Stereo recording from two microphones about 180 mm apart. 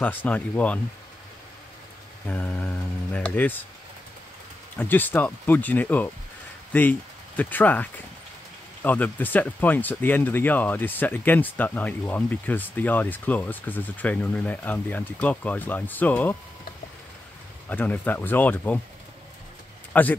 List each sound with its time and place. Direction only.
0.0 s speech: 10° left (ahead or behind)
2.2 s speech: 10° left (ahead or behind)
4.7 s speech: 10° left (ahead or behind)
17.6 s speech: 10° left (ahead or behind)
19.9 s speech: 10° left (ahead or behind)